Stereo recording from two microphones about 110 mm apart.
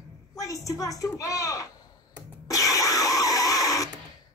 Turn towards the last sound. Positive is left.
turn(degrees=30)  # may be behind; listen again after turning